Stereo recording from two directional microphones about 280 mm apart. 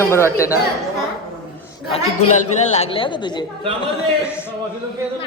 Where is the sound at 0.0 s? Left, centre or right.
Centre.